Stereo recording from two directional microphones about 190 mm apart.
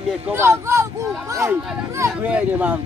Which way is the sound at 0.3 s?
15° right (ahead or behind).